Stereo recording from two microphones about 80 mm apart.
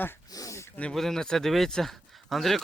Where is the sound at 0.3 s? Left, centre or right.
Left.